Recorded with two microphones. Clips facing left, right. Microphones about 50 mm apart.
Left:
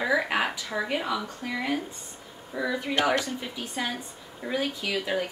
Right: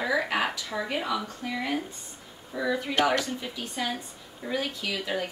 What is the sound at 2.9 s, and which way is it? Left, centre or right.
Speech, left.